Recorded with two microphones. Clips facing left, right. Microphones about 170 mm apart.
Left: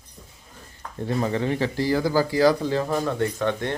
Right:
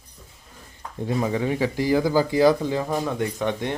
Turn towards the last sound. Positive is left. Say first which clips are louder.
# even
turn(degrees=-15)  # may be behind; listen again after turning